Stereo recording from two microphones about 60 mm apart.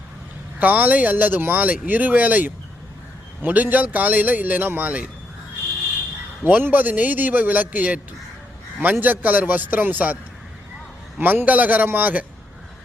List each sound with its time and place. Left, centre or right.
0.6 s a man's voice: right
6.4 s a man's voice: right
11.2 s a man's voice: right